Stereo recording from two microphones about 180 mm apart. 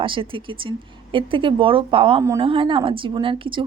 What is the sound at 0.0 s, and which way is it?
A woman's voice, 30° right (ahead or behind).